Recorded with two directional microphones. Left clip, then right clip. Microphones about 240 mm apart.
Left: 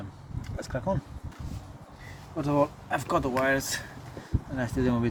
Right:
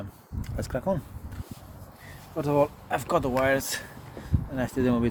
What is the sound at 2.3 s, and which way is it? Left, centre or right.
Speech, right.